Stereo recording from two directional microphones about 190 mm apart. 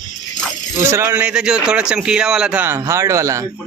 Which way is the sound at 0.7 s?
15° right (ahead or behind).